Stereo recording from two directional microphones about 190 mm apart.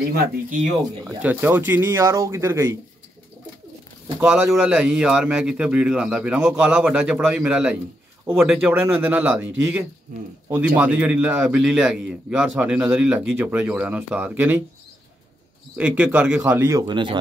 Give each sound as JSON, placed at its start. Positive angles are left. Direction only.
{"t": 0.1, "sound": "speech", "side_deg": -50}
{"t": 1.0, "sound": "a man's voice", "side_deg": -10}
{"t": 4.2, "sound": "a man's voice", "side_deg": -5}
{"t": 15.8, "sound": "a man's voice", "side_deg": -10}